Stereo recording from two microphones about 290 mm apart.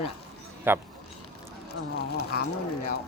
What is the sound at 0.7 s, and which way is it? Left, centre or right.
Speech, centre.